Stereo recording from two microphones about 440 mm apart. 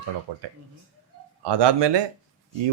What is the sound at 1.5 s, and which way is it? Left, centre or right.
Speech, right.